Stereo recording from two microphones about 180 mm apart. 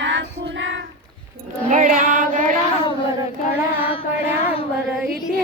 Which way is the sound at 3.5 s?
30° left (ahead or behind).